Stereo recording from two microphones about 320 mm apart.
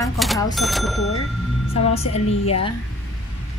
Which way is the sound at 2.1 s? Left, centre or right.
Left.